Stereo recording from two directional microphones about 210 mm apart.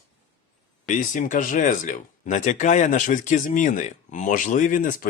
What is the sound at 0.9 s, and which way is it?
Speech, 40° left (ahead or behind).